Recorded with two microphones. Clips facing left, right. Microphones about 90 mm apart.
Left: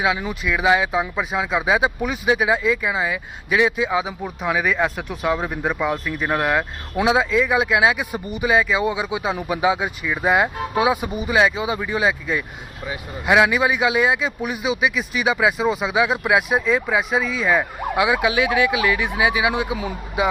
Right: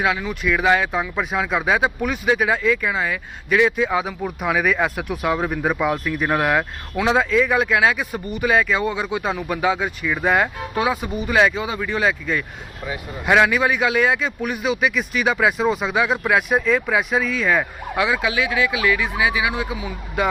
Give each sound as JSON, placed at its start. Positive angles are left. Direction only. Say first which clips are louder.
{"t": 0.3, "sound": "speech", "louder": "right 1 dB", "side_deg": 5}
{"t": 17.9, "sound": "speech", "louder": "left 2 dB", "side_deg": 15}
{"t": 20.2, "sound": "speech", "louder": "even", "side_deg": 5}